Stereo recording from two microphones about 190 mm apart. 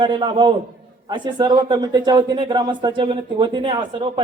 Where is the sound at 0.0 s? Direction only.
25° right (ahead or behind).